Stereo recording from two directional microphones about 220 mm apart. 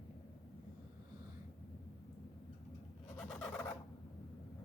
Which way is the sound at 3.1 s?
5° left (ahead or behind).